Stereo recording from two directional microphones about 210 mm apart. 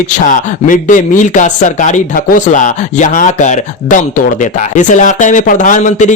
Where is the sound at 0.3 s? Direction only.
40° left (ahead or behind).